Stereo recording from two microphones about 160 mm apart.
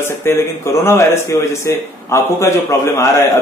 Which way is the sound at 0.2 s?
15° left (ahead or behind).